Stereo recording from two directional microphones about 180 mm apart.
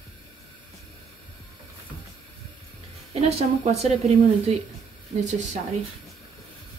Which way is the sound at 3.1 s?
35° right (ahead or behind).